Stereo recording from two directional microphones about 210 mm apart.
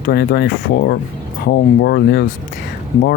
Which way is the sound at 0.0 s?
50° left (ahead or behind).